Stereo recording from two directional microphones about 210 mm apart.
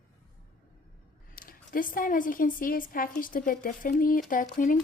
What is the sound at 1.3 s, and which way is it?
A woman's voice, 40° left (ahead or behind).